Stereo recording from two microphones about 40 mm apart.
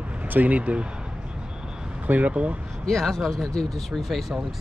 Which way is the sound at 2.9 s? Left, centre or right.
Centre.